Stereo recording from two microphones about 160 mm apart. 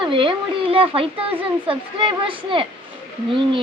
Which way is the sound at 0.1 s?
35° right (ahead or behind).